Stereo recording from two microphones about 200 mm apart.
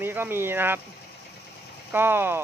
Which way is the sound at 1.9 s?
10° right (ahead or behind).